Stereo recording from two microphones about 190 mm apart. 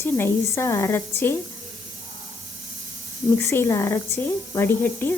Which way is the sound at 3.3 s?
10° left (ahead or behind).